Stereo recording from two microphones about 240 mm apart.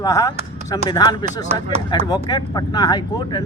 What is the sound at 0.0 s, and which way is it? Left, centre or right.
Speech, centre.